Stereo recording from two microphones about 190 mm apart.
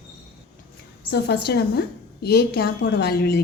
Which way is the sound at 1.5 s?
60° left (ahead or behind).